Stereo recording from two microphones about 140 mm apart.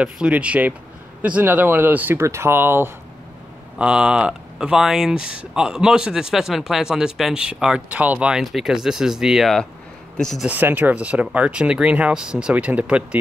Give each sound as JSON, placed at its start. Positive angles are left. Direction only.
{"t": 0.0, "sound": "speech", "side_deg": -10}
{"t": 10.4, "sound": "speech", "side_deg": -15}